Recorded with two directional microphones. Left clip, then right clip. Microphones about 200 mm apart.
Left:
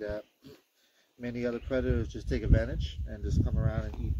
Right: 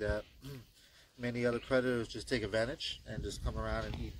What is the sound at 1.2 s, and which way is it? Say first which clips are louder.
Speech: even; 50° left (ahead or behind).